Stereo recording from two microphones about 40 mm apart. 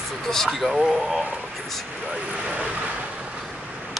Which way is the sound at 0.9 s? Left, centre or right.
Right.